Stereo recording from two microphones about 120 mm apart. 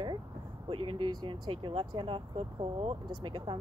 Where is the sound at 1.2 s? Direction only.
45° right (ahead or behind).